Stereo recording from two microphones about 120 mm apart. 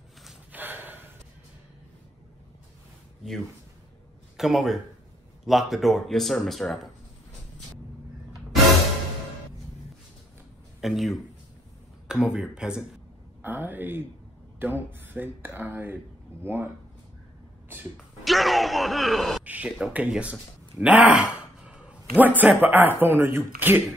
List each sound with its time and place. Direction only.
0.5 s snort: 15° right (ahead or behind)
4.4 s speech: centre (ahead or behind)
10.8 s speech: centre (ahead or behind); by 16.7 s 20° right (ahead or behind)
17.9 s a sound: centre (ahead or behind)
19.4 s speech: 10° right (ahead or behind)